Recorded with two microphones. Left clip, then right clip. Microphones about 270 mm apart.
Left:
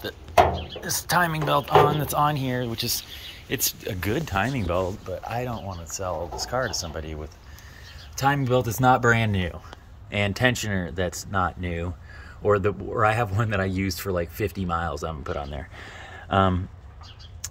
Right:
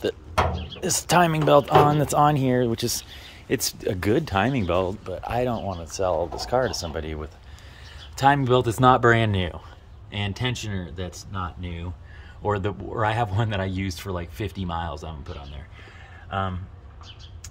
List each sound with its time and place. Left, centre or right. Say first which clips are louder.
0.8 s speech: right 3 dB; right; by 9.6 s centre
10.1 s speech: left 6 dB; centre
12.4 s speech: left 4 dB; centre
16.3 s speech: left 7 dB; left